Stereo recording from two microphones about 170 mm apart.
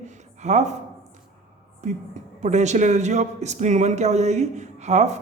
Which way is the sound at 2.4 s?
45° right (ahead or behind).